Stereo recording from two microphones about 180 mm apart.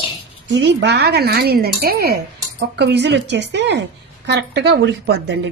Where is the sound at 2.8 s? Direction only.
70° right (ahead or behind).